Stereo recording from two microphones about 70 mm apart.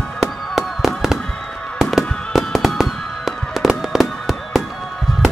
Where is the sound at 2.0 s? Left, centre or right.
Centre.